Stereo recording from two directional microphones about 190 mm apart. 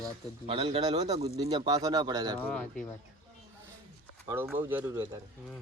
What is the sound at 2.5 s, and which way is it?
Speech, 5° left (ahead or behind).